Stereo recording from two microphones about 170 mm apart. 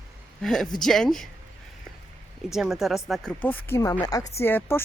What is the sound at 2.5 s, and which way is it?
Speech, centre (ahead or behind).